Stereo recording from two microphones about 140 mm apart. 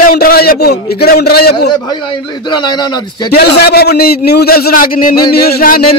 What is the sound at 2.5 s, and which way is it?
Speech, 30° left (ahead or behind).